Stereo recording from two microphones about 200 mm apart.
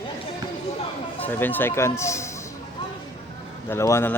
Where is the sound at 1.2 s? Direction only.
10° left (ahead or behind).